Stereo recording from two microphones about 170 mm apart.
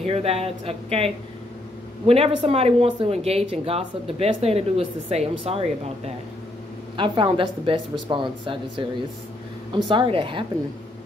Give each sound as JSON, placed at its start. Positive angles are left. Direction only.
{"t": 0.0, "sound": "a woman's voice", "side_deg": -35}
{"t": 9.8, "sound": "a woman's voice", "side_deg": -30}